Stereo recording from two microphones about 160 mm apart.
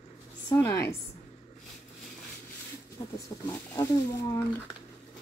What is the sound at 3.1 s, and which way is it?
Speech, 20° left (ahead or behind).